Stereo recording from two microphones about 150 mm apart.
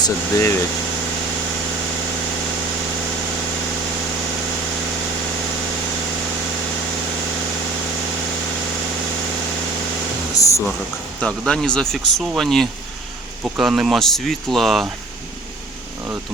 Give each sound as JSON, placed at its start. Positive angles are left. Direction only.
{"t": 0.0, "sound": "speech", "side_deg": 20}
{"t": 10.4, "sound": "a sound", "side_deg": 25}
{"t": 11.2, "sound": "speech", "side_deg": 5}